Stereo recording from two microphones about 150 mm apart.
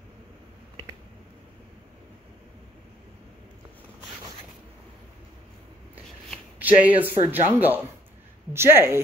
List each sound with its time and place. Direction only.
6.6 s speech: 10° right (ahead or behind)